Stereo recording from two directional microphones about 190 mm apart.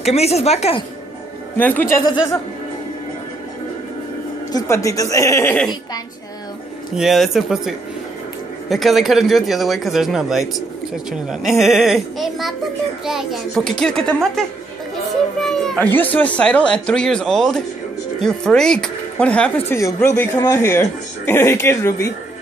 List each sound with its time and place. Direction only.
0.0 s a woman's voice: 35° left (ahead or behind)
1.6 s speech: 10° left (ahead or behind)
4.5 s speech: 15° left (ahead or behind)
7.0 s speech: centre (ahead or behind); by 22.1 s 15° left (ahead or behind)